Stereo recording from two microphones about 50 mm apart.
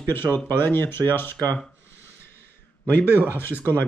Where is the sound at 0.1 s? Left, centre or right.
Left.